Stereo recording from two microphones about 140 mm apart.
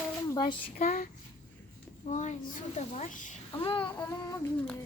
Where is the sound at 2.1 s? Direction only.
55° left (ahead or behind).